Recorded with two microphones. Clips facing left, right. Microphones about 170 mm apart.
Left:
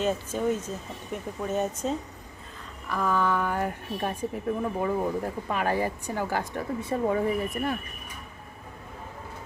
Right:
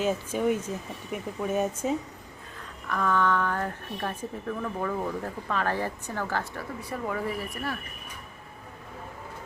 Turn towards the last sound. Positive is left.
turn(degrees=20)  # may be behind; listen again after turning